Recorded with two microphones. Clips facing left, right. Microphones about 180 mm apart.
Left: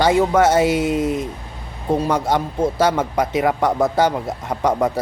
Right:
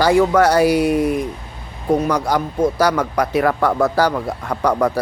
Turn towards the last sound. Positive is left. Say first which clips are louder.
# right 1 dB
turn(degrees=20)  # may be behind; listen again after turning